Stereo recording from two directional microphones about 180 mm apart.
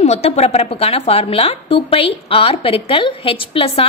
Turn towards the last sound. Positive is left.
turn(degrees=30)  # may be behind; listen again after turning